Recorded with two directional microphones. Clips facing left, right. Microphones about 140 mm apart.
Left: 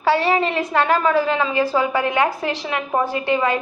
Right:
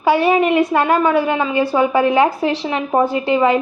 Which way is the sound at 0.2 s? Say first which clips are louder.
Right 6 dB; 15° right (ahead or behind).